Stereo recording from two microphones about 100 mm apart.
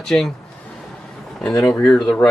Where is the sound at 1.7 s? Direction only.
10° left (ahead or behind).